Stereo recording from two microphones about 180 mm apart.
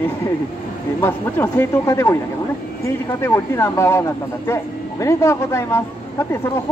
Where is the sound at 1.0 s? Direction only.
15° left (ahead or behind).